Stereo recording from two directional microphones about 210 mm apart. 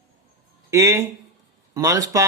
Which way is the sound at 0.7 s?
15° right (ahead or behind).